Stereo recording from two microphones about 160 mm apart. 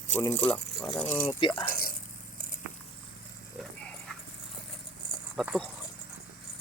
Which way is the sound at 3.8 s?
10° left (ahead or behind).